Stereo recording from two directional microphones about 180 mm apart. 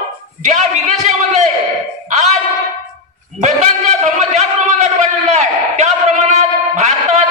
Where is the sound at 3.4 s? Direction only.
40° right (ahead or behind).